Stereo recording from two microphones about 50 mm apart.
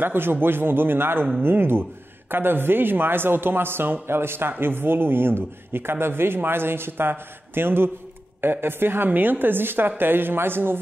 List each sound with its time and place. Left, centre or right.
0.0 s a man's voice: right